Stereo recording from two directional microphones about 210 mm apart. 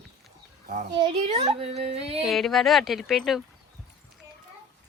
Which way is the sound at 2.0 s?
30° right (ahead or behind).